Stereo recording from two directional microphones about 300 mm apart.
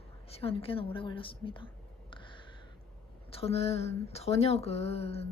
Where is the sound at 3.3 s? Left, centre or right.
Centre.